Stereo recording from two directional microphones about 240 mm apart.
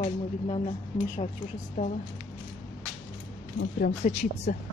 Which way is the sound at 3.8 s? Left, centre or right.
Left.